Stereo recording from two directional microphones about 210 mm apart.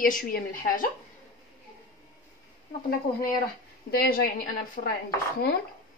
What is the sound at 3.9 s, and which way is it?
Speech, 45° left (ahead or behind).